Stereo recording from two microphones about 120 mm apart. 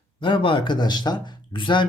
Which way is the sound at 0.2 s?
45° left (ahead or behind).